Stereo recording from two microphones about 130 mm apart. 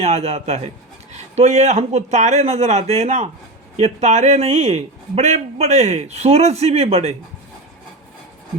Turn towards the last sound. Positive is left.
turn(degrees=-50)  # may be behind; listen again after turning